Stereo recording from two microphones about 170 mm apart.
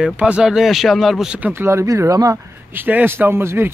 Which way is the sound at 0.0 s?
5° right (ahead or behind).